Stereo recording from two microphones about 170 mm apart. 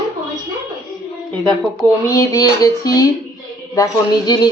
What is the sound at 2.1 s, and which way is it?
A woman's voice, 20° left (ahead or behind).